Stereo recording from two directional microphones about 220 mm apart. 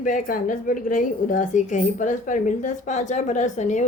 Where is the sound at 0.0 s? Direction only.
40° left (ahead or behind).